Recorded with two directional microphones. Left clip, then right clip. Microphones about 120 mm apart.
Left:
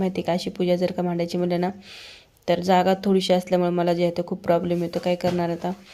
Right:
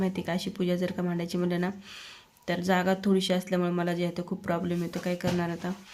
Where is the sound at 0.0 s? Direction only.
35° left (ahead or behind).